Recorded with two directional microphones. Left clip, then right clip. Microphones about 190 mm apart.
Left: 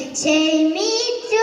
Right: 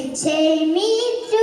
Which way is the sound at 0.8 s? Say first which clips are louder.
Right 1 dB; 15° left (ahead or behind).